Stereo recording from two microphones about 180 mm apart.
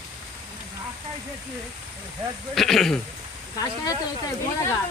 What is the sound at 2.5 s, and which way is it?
Speech, centre (ahead or behind).